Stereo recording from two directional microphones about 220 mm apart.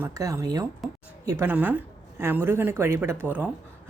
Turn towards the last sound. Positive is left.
turn(degrees=-10)  # may be behind; listen again after turning